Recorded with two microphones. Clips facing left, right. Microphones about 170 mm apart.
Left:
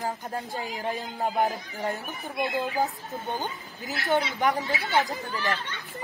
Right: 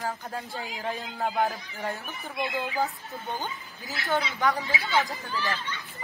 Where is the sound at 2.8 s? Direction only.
15° left (ahead or behind).